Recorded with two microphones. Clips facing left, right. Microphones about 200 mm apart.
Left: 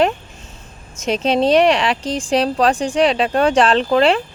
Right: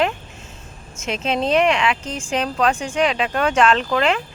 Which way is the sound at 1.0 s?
35° left (ahead or behind).